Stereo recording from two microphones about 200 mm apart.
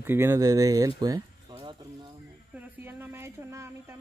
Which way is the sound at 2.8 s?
10° right (ahead or behind).